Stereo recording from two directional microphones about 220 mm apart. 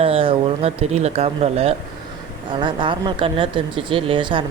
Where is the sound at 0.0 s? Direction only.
25° right (ahead or behind).